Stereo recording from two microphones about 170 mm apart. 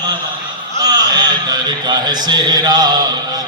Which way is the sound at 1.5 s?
25° right (ahead or behind).